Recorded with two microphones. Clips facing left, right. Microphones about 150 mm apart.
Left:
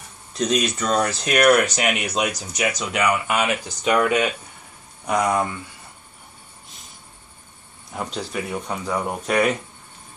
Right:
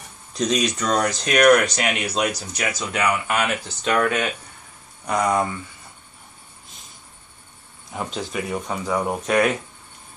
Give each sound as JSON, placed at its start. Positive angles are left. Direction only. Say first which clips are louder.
{"t": 0.3, "sound": "speech", "louder": "even", "side_deg": 0}
{"t": 7.9, "sound": "speech", "louder": "even", "side_deg": 0}